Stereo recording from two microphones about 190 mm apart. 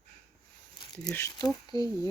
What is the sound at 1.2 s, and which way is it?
Speech, 15° left (ahead or behind).